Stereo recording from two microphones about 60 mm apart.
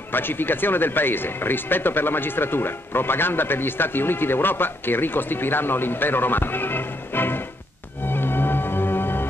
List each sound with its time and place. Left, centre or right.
0.1 s speech: left
8.1 s music: left